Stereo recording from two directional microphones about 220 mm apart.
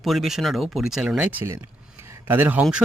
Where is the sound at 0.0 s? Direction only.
Centre (ahead or behind).